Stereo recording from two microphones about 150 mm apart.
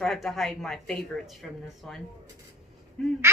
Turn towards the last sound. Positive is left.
turn(degrees=5)  # may be behind; listen again after turning